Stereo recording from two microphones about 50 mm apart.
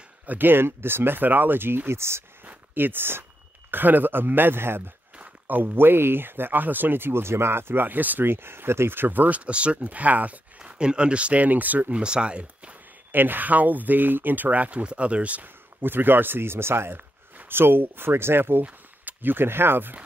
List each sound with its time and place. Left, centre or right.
0.3 s speech: right
2.4 s a sound: right
3.7 s speech: right
8.3 s speech: right
9.4 s speech: right
10.6 s speech: centre
13.1 s speech: right
15.4 s speech: right
16.9 s speech: right